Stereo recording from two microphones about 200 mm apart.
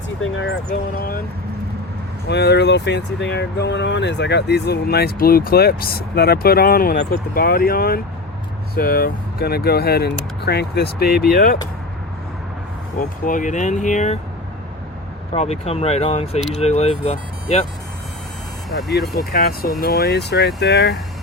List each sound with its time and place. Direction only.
0.2 s speech: 70° left (ahead or behind)
0.9 s speech: 45° left (ahead or behind)
2.2 s speech: 55° left (ahead or behind)
13.0 s speech: 40° left (ahead or behind)
15.3 s speech: 30° left (ahead or behind)
18.8 s speech: centre (ahead or behind)
19.3 s speech: 50° left (ahead or behind)